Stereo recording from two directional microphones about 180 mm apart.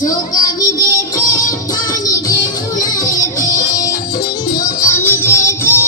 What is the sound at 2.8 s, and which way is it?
Music, 20° left (ahead or behind).